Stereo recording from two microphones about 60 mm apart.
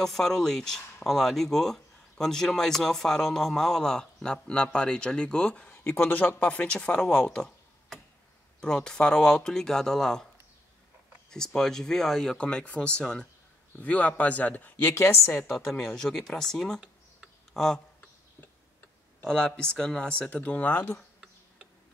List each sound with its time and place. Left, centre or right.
0.0 s speech: centre
5.9 s speech: left; by 7.5 s centre
8.5 s speech: centre
11.2 s speech: centre; by 14.9 s left
15.6 s speech: centre
19.2 s speech: centre